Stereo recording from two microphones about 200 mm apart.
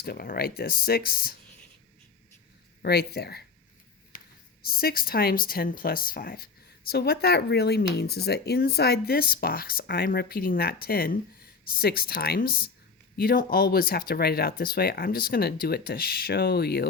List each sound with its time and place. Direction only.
0.0 s speech: 50° left (ahead or behind)
2.8 s speech: 55° left (ahead or behind)
4.6 s speech: 50° left (ahead or behind)